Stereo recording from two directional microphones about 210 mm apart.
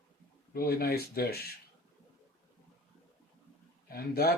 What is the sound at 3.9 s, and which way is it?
Speech, 45° left (ahead or behind).